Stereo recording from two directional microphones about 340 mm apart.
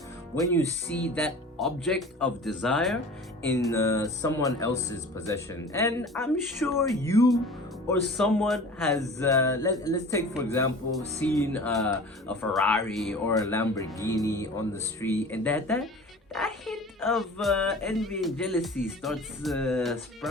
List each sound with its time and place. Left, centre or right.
0.3 s speech: centre